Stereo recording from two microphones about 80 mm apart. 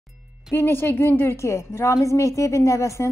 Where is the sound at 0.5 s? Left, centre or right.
Left.